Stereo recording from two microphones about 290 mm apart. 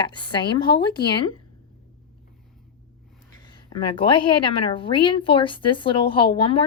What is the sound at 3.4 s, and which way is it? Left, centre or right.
Speech, centre.